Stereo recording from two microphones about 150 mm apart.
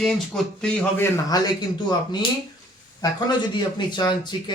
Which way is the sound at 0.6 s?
15° left (ahead or behind).